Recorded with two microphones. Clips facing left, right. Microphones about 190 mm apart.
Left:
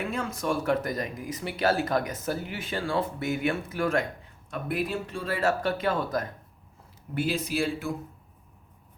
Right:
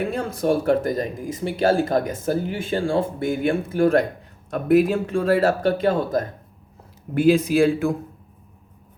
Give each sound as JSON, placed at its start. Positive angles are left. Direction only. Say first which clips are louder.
{"t": 0.0, "sound": "speech", "louder": "right 7 dB", "side_deg": -35}
{"t": 4.5, "sound": "speech", "louder": "right 12 dB", "side_deg": -45}
{"t": 7.3, "sound": "speech", "louder": "right 13 dB", "side_deg": -50}